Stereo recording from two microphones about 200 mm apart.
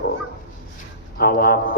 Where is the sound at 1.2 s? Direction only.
50° left (ahead or behind).